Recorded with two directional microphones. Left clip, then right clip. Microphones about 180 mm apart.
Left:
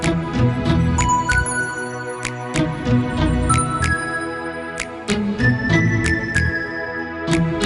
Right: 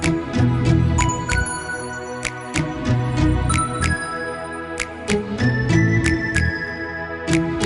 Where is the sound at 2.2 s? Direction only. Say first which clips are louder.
Left 2 dB; centre (ahead or behind).